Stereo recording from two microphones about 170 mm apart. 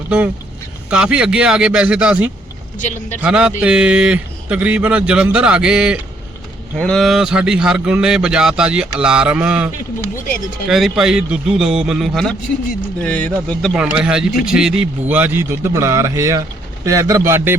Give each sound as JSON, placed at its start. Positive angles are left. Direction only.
{"t": 0.9, "sound": "a man's voice", "side_deg": -5}
{"t": 2.7, "sound": "a man's voice", "side_deg": 45}
{"t": 3.2, "sound": "a man's voice", "side_deg": -5}
{"t": 10.7, "sound": "a man's voice", "side_deg": 0}